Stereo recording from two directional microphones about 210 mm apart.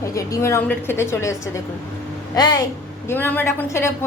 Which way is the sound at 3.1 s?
10° left (ahead or behind).